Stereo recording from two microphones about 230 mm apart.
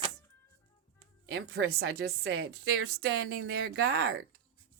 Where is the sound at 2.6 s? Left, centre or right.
Right.